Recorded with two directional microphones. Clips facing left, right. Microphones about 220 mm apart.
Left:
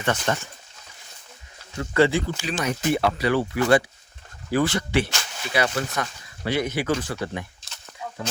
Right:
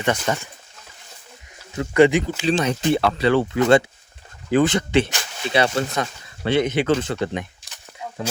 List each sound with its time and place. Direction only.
0.0 s speech: 10° right (ahead or behind)
1.8 s speech: 20° right (ahead or behind)